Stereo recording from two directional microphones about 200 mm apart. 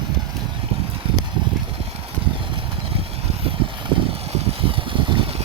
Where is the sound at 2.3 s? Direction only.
25° right (ahead or behind).